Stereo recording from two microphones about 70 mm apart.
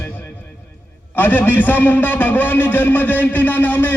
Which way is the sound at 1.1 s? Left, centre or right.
Left.